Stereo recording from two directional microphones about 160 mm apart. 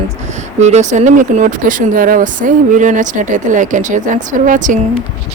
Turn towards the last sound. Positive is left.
turn(degrees=-50)  # may be behind; listen again after turning